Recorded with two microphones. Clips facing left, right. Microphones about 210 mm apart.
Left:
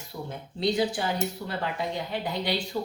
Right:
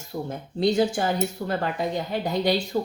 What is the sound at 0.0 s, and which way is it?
Speech, 45° right (ahead or behind).